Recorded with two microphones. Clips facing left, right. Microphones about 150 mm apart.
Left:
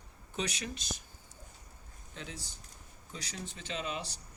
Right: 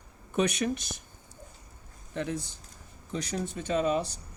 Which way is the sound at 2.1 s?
60° right (ahead or behind).